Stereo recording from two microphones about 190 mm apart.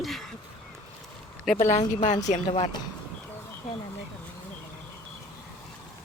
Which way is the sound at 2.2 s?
35° left (ahead or behind).